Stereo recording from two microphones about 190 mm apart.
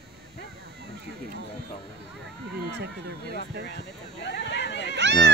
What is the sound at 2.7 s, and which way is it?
Speech, 60° right (ahead or behind).